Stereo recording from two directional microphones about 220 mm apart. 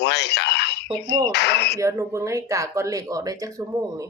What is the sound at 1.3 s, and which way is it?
Speech, 50° left (ahead or behind).